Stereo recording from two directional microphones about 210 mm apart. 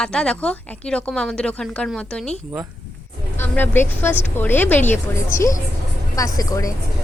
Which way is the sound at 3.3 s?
10° left (ahead or behind).